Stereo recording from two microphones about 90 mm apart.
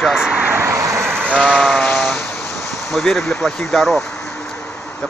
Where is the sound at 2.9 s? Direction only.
5° left (ahead or behind).